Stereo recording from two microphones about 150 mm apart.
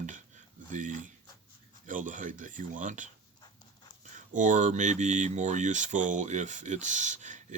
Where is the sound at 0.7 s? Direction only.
55° right (ahead or behind).